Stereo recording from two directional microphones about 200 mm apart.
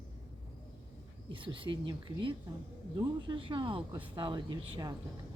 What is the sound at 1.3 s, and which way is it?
Speech, 25° right (ahead or behind).